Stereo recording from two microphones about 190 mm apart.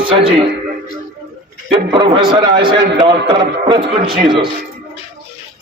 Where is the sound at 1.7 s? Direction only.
25° right (ahead or behind).